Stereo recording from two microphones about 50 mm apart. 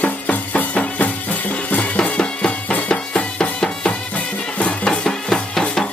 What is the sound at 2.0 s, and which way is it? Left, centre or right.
Music, left.